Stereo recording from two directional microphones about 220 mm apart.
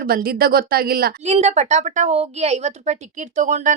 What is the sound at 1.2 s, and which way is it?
A woman's voice, 30° right (ahead or behind).